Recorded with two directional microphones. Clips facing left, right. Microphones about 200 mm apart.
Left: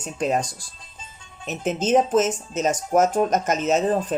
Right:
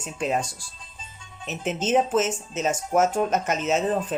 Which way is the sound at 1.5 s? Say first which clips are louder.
Left 3 dB; 40° left (ahead or behind).